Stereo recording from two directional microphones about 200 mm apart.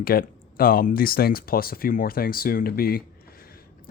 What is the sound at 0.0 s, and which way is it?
Speech, 50° left (ahead or behind).